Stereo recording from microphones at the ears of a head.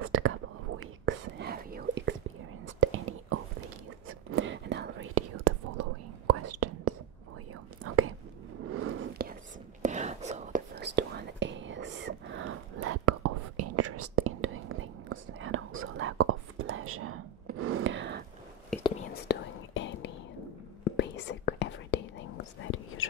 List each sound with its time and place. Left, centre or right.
0.0 s whispering: right
8.5 s a sound: right
10.4 s whispering: right
18.8 s whispering: left